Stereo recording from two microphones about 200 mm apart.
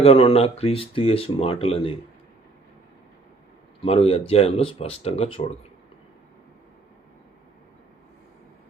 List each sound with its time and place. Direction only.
0.0 s speech: 30° left (ahead or behind)
3.8 s speech: 30° left (ahead or behind)